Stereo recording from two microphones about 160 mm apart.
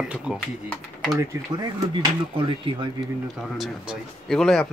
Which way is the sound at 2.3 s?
35° right (ahead or behind).